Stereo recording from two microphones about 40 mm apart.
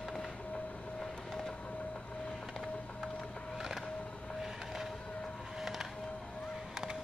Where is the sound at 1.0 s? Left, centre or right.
Centre.